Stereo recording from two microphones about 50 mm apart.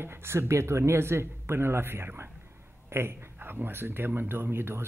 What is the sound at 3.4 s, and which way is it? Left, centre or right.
Speech, right.